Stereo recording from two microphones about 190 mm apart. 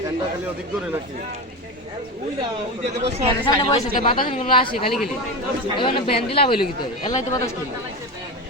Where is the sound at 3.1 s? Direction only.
35° right (ahead or behind).